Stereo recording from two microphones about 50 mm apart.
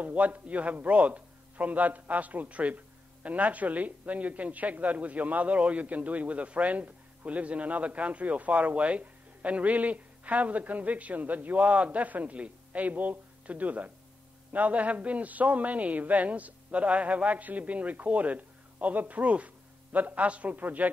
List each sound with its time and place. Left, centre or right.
0.0 s a woman's voice: right